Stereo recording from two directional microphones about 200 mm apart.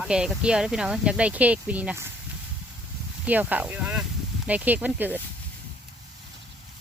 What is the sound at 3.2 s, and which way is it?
Speech, 10° right (ahead or behind).